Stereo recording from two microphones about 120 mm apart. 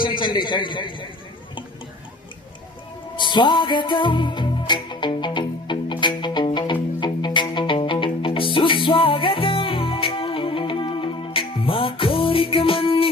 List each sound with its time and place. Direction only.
0.0 s a man's voice: 40° left (ahead or behind)
3.2 s music: 40° left (ahead or behind)